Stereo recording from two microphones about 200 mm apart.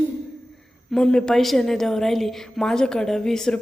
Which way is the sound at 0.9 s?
5° left (ahead or behind).